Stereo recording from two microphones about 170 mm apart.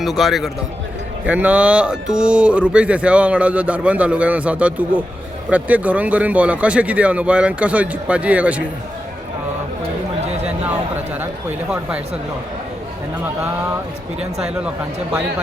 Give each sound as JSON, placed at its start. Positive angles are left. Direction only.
{"t": 0.0, "sound": "speech", "side_deg": 0}
{"t": 10.4, "sound": "a sound", "side_deg": -10}
{"t": 11.7, "sound": "speech", "side_deg": -5}